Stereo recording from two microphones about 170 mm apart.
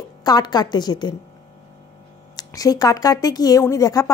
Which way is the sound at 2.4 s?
20° left (ahead or behind).